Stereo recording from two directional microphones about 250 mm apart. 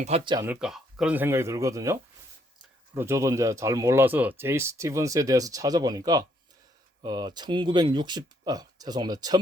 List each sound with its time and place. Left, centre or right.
0.0 s speech: right
0.4 s speech: centre